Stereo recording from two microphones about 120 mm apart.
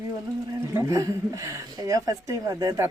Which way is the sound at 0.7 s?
25° right (ahead or behind).